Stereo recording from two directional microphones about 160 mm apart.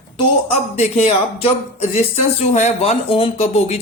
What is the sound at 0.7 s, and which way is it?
Speech, 40° left (ahead or behind).